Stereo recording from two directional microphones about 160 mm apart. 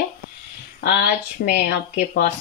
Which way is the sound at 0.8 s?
80° left.